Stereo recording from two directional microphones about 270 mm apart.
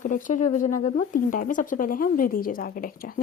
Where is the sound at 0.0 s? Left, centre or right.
Left.